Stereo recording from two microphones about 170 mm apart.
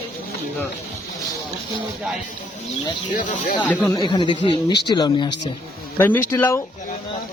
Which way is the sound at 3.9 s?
25° left (ahead or behind).